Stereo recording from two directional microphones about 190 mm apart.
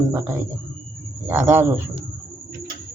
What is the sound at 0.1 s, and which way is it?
Speech, 15° right (ahead or behind).